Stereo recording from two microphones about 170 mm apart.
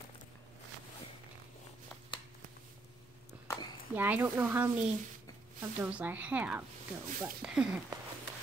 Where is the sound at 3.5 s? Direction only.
15° left (ahead or behind).